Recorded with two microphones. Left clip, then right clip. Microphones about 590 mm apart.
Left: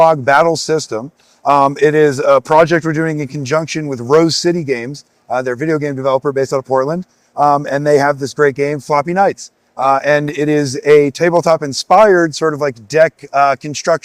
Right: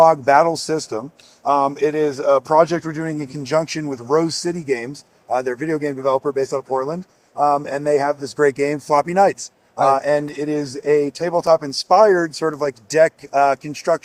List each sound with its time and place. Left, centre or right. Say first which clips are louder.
0.0 s speech: left 3 dB; left